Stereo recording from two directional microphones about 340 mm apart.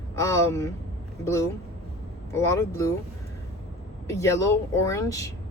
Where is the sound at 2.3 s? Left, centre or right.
Centre.